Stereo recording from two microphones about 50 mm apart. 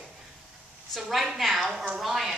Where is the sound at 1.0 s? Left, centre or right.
Centre.